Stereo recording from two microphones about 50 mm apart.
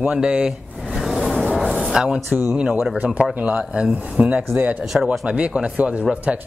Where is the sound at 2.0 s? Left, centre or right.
Centre.